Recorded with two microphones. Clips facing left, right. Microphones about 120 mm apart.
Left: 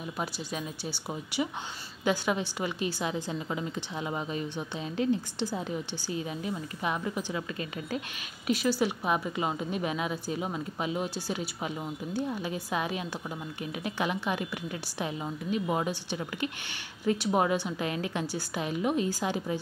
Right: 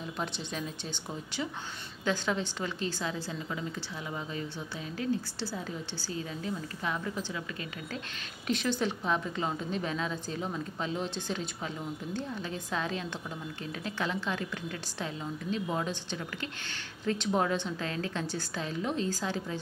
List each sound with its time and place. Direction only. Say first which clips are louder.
0.2 s a woman's voice: left 1 dB; 5° left (ahead or behind)
8.5 s a woman's voice: left 3 dB; 5° left (ahead or behind)